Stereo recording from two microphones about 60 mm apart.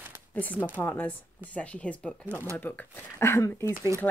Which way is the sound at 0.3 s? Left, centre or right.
Left.